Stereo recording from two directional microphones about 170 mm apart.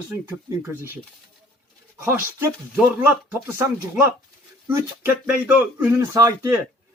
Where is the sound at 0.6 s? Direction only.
15° right (ahead or behind).